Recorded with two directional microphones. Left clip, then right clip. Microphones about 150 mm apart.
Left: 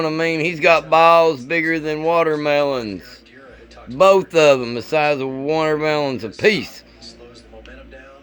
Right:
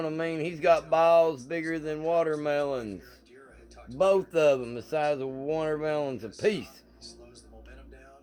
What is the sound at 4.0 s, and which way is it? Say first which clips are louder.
Speech: left 11 dB; 30° left (ahead or behind).